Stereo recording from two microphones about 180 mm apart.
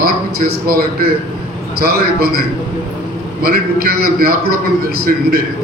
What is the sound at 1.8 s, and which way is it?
Speech, 60° right (ahead or behind).